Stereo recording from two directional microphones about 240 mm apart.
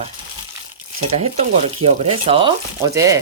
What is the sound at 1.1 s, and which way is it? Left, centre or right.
Speech, right.